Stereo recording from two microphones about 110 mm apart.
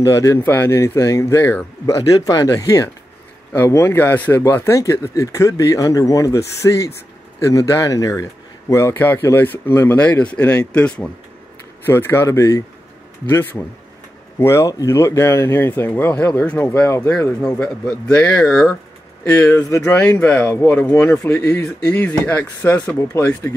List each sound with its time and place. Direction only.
0.0 s speech: 30° left (ahead or behind)
0.4 s speech: 20° left (ahead or behind)
2.0 s speech: 35° left (ahead or behind); by 11.1 s 10° left (ahead or behind)
11.8 s speech: 20° left (ahead or behind)
16.8 s speech: 25° left (ahead or behind)
17.5 s speech: 10° left (ahead or behind)